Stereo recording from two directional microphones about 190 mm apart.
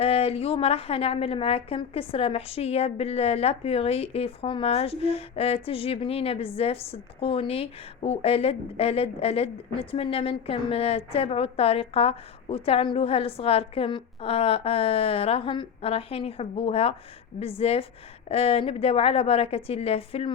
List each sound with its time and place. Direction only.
0.0 s a woman's voice: 30° left (ahead or behind)